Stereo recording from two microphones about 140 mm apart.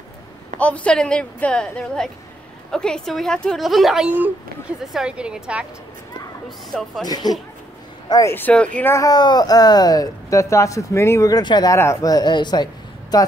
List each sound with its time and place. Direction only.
0.6 s a woman's voice: 10° left (ahead or behind); by 5.7 s 10° right (ahead or behind)
6.7 s speech: centre (ahead or behind)
7.1 s speech: 30° left (ahead or behind)